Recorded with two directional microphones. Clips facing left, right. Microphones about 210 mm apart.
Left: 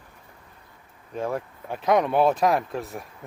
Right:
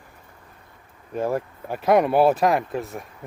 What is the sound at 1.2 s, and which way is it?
Speech, 5° right (ahead or behind).